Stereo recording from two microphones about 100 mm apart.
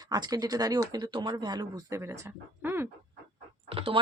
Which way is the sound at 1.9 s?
25° right (ahead or behind).